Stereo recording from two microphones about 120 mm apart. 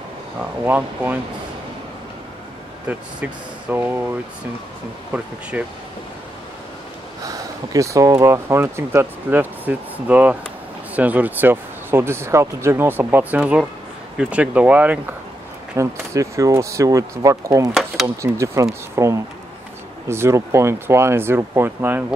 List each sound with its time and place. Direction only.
0.4 s speech: 15° right (ahead or behind)
2.9 s speech: 10° right (ahead or behind)
5.1 s speech: 10° right (ahead or behind)
7.2 s speech: 30° right (ahead or behind); by 15.1 s 10° right (ahead or behind)
15.7 s speech: 25° right (ahead or behind)